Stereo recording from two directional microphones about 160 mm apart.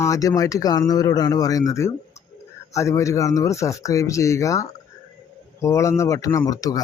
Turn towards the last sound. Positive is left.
turn(degrees=20)  # may be behind; listen again after turning